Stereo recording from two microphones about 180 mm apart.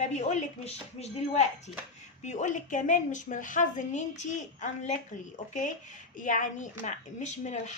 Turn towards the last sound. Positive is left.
turn(degrees=40)  # may be behind; listen again after turning